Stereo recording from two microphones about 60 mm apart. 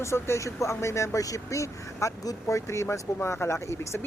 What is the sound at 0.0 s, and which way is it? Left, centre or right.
Speech, left.